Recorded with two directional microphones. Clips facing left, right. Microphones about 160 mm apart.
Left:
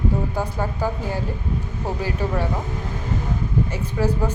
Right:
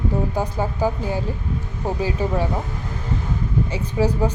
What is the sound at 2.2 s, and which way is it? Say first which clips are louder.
Speech: right 1 dB; 15° right (ahead or behind).